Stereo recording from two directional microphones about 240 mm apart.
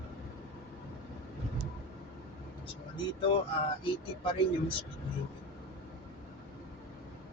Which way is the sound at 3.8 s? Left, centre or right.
Left.